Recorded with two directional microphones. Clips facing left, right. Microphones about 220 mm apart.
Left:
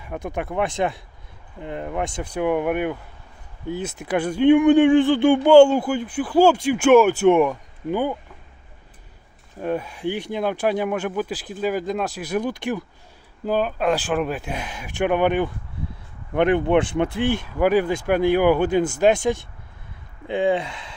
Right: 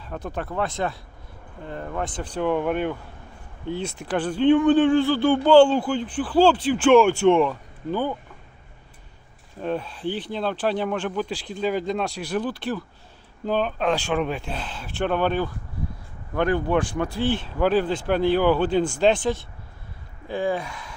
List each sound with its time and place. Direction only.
0.1 s speech: 15° left (ahead or behind)
9.6 s speech: 10° left (ahead or behind)